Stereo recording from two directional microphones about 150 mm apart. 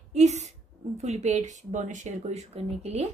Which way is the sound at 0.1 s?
50° right (ahead or behind).